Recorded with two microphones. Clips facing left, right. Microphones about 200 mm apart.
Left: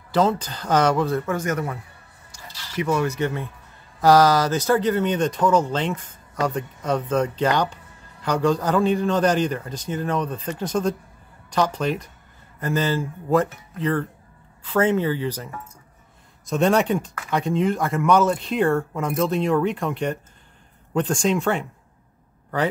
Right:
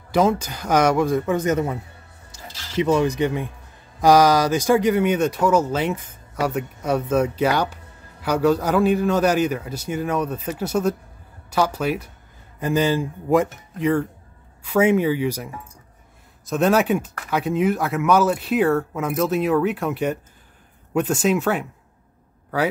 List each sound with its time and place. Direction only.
0.1 s speech: 10° right (ahead or behind)